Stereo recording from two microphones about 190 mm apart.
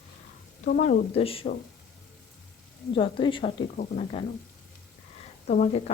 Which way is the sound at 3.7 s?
40° left (ahead or behind).